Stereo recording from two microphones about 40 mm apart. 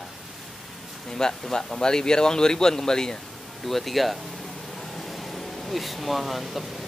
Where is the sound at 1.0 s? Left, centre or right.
Centre.